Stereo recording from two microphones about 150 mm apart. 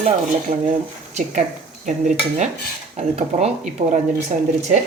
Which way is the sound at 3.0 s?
45° right (ahead or behind).